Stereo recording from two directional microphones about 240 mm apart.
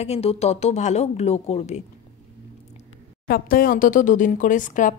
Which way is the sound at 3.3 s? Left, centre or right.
Left.